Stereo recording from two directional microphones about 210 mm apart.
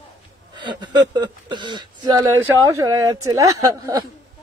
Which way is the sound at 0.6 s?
20° right (ahead or behind).